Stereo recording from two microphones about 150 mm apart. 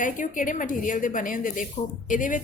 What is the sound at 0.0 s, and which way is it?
A woman's voice, 60° left (ahead or behind).